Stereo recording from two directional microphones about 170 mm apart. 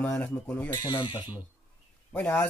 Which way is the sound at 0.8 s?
25° left (ahead or behind).